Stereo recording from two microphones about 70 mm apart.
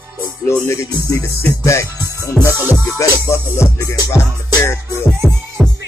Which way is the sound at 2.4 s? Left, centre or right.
Centre.